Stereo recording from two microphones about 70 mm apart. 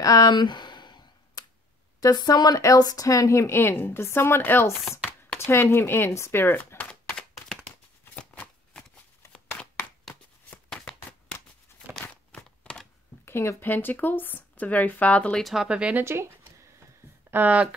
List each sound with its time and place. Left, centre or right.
0.0 s a sound: left
2.0 s speech: left
6.9 s a sound: centre
8.0 s shuffling cards: left
11.7 s tearing: left
13.2 s speech: left; by 15.3 s centre
15.3 s speech: centre
16.0 s speech: right
17.3 s speech: right